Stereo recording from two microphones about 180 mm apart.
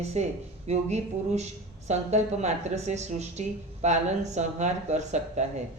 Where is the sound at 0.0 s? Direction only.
35° right (ahead or behind).